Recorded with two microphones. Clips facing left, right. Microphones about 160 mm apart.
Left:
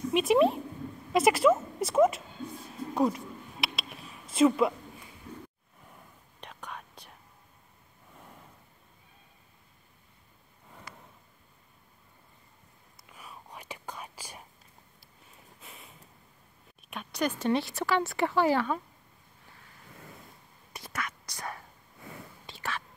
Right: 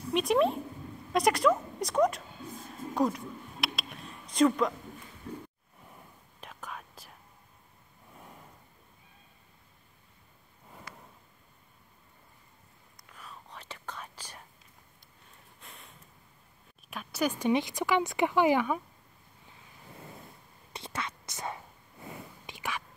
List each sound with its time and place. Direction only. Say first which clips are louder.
0.1 s a woman's voice: left 2 dB; centre (ahead or behind)
2.9 s a sound: left 1 dB; centre (ahead or behind)
6.4 s whispering: even; centre (ahead or behind)
12.9 s whispering: left 1 dB; 10° left (ahead or behind)
15.6 s snort: left 1 dB; centre (ahead or behind)
16.9 s speech: even; 5° right (ahead or behind)
20.7 s whispering: even; 25° right (ahead or behind)